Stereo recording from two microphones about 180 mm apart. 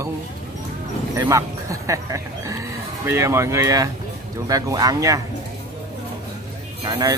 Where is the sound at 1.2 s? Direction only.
15° right (ahead or behind).